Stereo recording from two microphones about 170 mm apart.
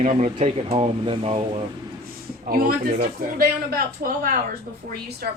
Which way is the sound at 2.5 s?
60° right (ahead or behind).